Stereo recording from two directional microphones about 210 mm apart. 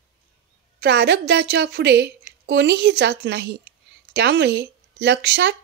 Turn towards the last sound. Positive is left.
turn(degrees=-55)  # may be behind; listen again after turning